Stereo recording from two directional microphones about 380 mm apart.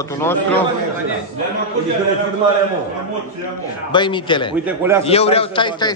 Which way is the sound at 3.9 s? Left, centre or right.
Centre.